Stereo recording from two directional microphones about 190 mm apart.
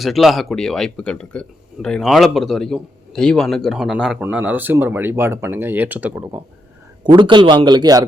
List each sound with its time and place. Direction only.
0.0 s speech: centre (ahead or behind)
7.0 s a man's voice: 25° right (ahead or behind)